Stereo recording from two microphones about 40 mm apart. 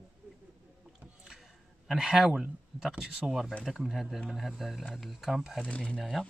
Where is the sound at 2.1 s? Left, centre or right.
Centre.